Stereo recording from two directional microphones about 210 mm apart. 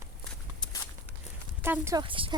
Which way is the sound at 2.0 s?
25° right (ahead or behind).